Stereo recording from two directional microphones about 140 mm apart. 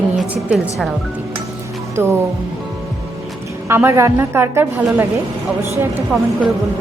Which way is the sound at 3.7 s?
20° right (ahead or behind).